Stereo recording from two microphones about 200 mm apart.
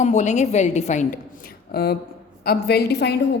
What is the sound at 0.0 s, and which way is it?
A woman's voice, 35° left (ahead or behind).